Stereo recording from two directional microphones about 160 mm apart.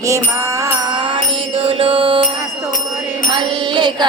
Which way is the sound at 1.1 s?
35° right (ahead or behind).